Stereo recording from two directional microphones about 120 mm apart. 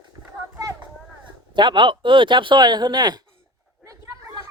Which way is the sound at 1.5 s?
40° right (ahead or behind).